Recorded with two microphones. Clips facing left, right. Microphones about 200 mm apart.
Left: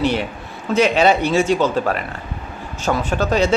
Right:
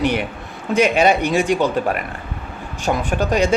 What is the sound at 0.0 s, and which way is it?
A man's voice, 15° right (ahead or behind).